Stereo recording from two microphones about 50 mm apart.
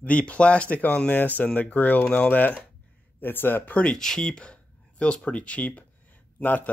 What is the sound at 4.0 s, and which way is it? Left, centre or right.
Speech, centre.